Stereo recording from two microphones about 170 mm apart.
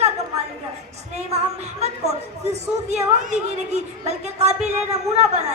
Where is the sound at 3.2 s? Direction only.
45° right (ahead or behind).